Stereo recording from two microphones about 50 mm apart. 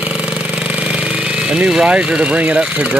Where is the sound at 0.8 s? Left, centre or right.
Centre.